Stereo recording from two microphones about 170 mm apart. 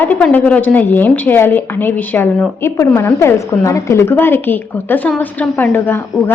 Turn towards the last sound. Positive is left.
turn(degrees=15)  # may be behind; listen again after turning